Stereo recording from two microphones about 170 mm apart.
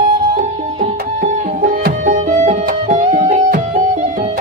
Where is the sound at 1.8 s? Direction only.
50° right (ahead or behind).